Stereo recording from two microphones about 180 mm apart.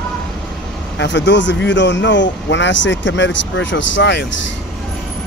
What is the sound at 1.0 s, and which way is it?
Speech, 80° left.